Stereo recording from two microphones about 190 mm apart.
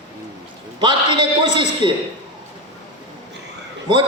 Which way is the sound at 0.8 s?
25° right (ahead or behind).